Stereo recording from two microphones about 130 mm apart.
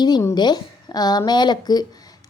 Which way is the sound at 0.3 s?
35° left (ahead or behind).